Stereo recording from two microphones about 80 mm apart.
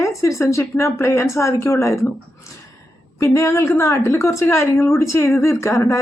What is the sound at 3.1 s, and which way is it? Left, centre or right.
Speech, left.